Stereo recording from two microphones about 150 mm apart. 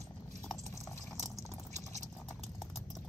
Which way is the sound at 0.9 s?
20° left (ahead or behind).